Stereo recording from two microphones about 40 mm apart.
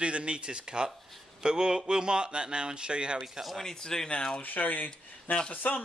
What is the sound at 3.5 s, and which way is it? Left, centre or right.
Speech, centre.